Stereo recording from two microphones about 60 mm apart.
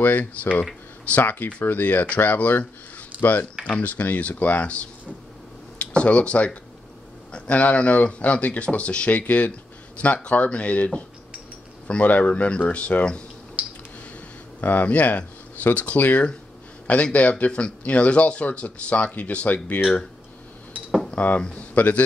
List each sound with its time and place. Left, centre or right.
0.0 s speech: left
3.6 s speech: left
5.8 s a sound: left
7.3 s speech: left
13.6 s a sound: right
14.6 s speech: left
21.1 s speech: left